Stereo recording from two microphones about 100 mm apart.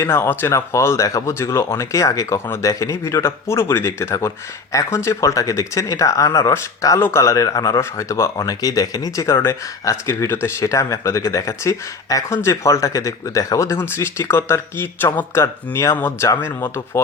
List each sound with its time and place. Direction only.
0.0 s speech: 25° left (ahead or behind)
9.1 s speech: 30° left (ahead or behind)